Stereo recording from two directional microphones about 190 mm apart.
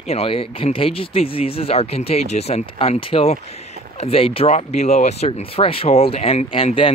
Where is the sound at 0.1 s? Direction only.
30° left (ahead or behind).